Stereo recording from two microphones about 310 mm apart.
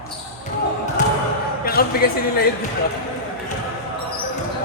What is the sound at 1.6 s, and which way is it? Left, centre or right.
Speech, left.